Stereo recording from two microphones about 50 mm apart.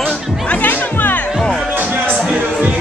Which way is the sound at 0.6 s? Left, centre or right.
Left.